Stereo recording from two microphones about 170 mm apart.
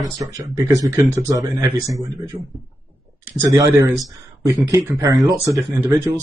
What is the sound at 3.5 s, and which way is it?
Speech, 20° right (ahead or behind).